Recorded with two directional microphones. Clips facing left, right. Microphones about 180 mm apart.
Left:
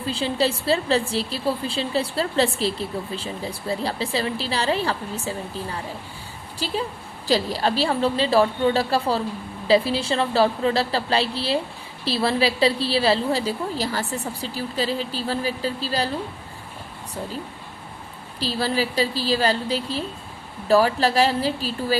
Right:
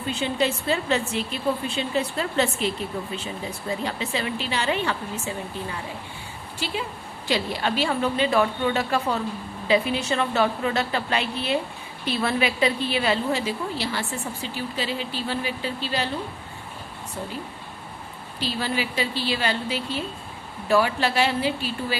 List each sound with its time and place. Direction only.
0.0 s speech: 30° left (ahead or behind)
6.6 s speech: 35° left (ahead or behind)
18.3 s speech: 35° left (ahead or behind)